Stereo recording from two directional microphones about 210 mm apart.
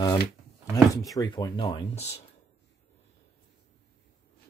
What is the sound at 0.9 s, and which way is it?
Speech, 15° left (ahead or behind).